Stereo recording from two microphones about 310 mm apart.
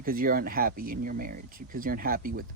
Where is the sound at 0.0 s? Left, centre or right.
Right.